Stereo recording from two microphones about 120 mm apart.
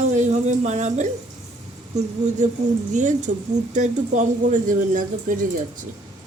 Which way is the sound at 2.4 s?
90° right.